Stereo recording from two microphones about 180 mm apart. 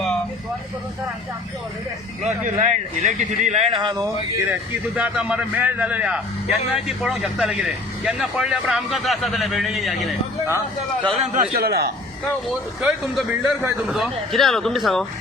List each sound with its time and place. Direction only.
2.2 s a man's voice: 40° right (ahead or behind)
3.8 s a sound: 25° right (ahead or behind)
4.4 s a man's voice: 10° right (ahead or behind)
11.3 s a man's voice: 60° right (ahead or behind)
12.8 s a man's voice: 5° right (ahead or behind)